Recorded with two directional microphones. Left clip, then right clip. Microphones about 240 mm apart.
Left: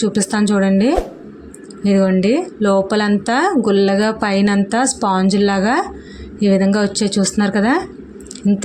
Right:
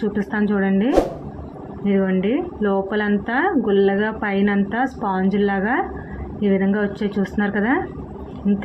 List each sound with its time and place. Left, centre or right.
0.1 s speech: left